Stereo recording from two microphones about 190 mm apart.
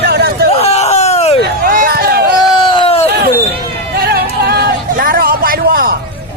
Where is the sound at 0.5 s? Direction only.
35° left (ahead or behind).